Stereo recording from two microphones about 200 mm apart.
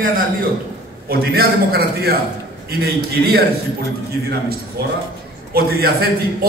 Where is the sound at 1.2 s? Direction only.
50° right (ahead or behind).